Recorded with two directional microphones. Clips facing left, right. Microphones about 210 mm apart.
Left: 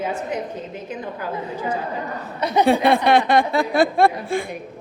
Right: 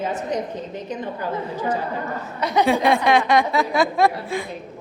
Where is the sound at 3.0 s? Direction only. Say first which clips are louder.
Left 1 dB; 35° left (ahead or behind).